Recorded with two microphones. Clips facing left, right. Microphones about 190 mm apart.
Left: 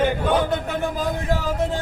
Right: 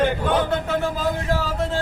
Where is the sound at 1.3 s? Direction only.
15° left (ahead or behind).